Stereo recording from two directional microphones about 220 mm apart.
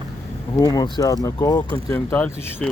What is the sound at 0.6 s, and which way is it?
Speech, 15° left (ahead or behind).